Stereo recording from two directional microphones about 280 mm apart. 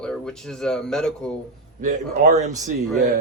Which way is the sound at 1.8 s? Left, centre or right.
Right.